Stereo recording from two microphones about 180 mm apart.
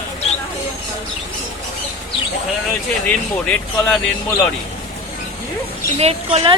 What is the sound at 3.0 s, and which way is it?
Speech, 10° left (ahead or behind).